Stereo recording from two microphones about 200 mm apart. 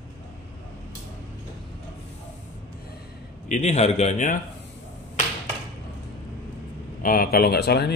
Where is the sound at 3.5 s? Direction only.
35° left (ahead or behind).